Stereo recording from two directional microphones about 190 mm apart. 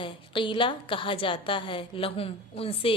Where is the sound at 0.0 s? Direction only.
25° left (ahead or behind).